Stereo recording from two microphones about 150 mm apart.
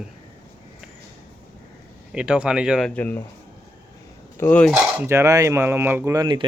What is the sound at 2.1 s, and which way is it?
Speech, 5° right (ahead or behind).